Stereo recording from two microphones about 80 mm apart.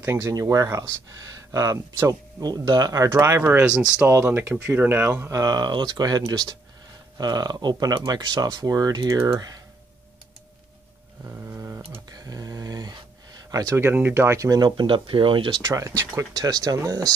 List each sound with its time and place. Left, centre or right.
0.0 s speech: right
2.4 s speech: right
2.9 s speech: right
3.2 s speech: right
4.1 s speech: right
5.3 s speech: right
11.2 s a sound: right
12.1 s a sound: right
13.7 s speech: right
14.6 s speech: right
15.6 s speech: right